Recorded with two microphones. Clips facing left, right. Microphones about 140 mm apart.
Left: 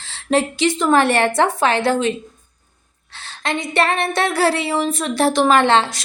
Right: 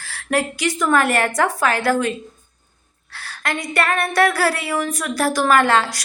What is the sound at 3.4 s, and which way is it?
A woman's voice, 25° left (ahead or behind).